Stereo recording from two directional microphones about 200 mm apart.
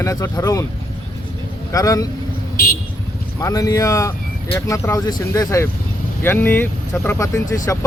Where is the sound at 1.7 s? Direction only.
15° left (ahead or behind).